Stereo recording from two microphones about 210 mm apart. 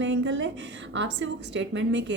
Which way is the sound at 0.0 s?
60° right (ahead or behind).